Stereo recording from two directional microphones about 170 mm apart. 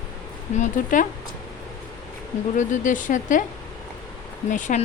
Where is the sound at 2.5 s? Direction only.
50° left (ahead or behind).